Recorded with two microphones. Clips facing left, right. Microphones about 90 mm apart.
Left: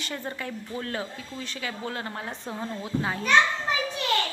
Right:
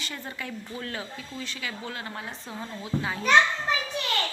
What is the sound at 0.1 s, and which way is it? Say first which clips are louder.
A woman's voice: left 3 dB; 35° left (ahead or behind).